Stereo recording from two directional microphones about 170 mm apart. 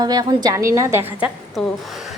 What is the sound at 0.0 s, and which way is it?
A woman's voice, 25° right (ahead or behind).